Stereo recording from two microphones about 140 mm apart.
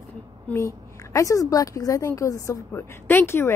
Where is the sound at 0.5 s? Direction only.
20° left (ahead or behind).